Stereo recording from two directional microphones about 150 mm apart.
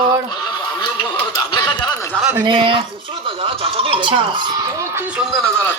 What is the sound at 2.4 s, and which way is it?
Speech, 35° right (ahead or behind).